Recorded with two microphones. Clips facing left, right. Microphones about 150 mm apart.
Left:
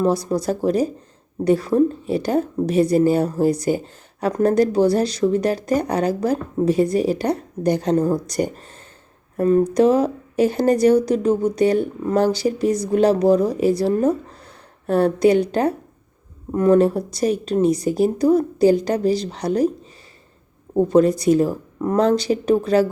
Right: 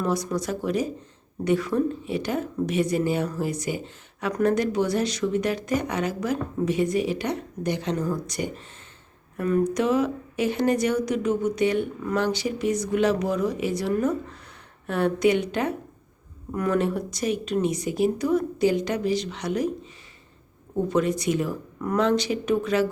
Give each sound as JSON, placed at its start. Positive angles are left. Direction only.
{"t": 0.0, "sound": "a woman's voice", "side_deg": 30}